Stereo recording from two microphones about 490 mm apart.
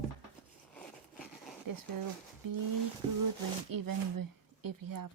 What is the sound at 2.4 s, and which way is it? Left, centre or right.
Speech, right.